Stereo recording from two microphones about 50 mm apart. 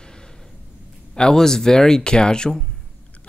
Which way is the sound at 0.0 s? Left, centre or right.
Centre.